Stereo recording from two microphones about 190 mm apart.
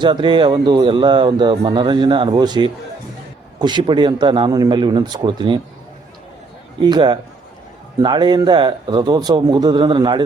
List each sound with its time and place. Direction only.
0.0 s speech: 25° right (ahead or behind)
6.8 s speech: 25° right (ahead or behind)